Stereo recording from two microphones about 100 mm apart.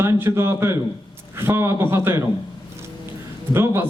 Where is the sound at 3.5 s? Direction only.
25° right (ahead or behind).